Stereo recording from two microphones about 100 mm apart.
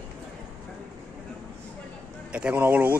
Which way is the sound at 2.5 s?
25° right (ahead or behind).